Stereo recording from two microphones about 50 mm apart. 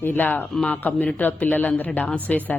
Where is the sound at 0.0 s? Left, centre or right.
Left.